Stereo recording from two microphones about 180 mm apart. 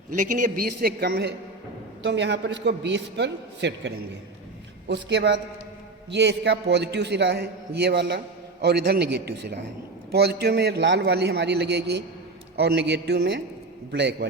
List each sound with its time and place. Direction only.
0.1 s a man's voice: 45° right (ahead or behind); by 1.3 s 60° right (ahead or behind)
2.0 s a man's voice: 70° right (ahead or behind)